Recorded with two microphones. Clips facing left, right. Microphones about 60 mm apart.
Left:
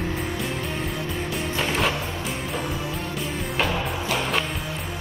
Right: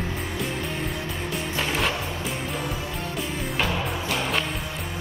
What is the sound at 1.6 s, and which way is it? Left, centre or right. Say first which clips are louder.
Music: left 2 dB; centre.